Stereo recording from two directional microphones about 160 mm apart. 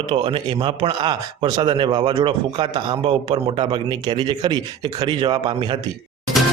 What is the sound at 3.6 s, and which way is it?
Speech, 25° right (ahead or behind).